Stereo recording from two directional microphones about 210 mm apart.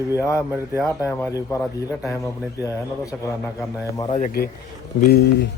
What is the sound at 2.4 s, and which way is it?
Speech, 10° right (ahead or behind).